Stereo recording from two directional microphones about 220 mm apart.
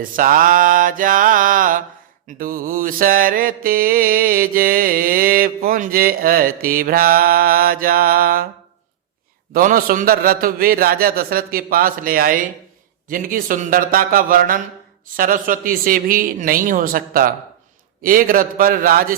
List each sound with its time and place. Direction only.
0.2 s mantra: 40° right (ahead or behind)
9.5 s mantra: 40° right (ahead or behind)